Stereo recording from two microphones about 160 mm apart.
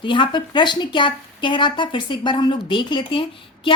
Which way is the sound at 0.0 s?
30° left (ahead or behind).